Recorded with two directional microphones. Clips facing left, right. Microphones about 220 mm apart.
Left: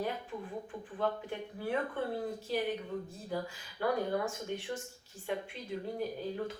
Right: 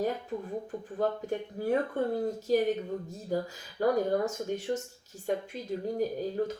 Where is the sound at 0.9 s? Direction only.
40° right (ahead or behind).